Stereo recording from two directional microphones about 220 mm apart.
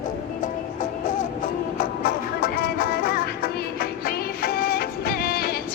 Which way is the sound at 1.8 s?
40° left (ahead or behind).